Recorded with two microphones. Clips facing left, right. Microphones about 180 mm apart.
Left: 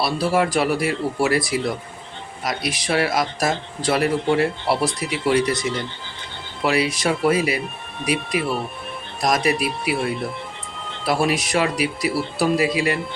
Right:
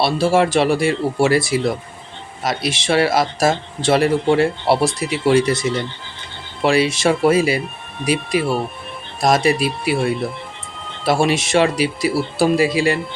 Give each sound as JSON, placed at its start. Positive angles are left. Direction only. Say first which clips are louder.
{"t": 0.0, "sound": "speech", "louder": "right 4 dB", "side_deg": -25}
{"t": 6.7, "sound": "speech", "louder": "right 5 dB", "side_deg": -25}
{"t": 11.0, "sound": "speech", "louder": "right 4 dB", "side_deg": -25}